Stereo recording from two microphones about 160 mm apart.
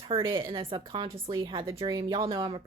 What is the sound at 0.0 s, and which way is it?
A woman's voice, 30° right (ahead or behind).